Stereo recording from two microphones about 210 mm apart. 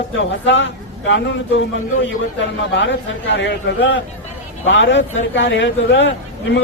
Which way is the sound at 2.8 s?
60° left (ahead or behind).